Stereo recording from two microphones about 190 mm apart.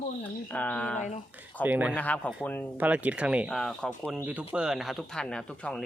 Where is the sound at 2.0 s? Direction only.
10° left (ahead or behind).